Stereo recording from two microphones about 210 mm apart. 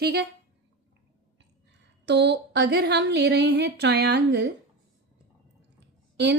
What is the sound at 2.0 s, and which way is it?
A woman's voice, 55° right (ahead or behind).